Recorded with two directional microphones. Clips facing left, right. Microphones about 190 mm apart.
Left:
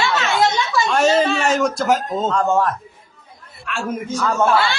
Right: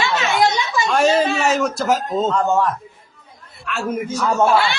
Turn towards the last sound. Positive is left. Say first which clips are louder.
# right 1 dB
turn(degrees=-15)  # may be behind; listen again after turning